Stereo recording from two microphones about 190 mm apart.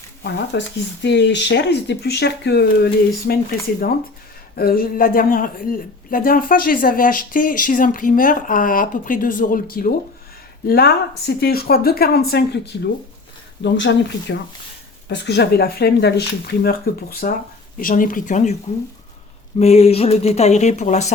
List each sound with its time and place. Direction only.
0.2 s speech: 65° left (ahead or behind)
4.5 s speech: 50° left (ahead or behind)
13.6 s speech: 70° left (ahead or behind); by 18.5 s 40° left (ahead or behind)
19.5 s speech: 35° left (ahead or behind)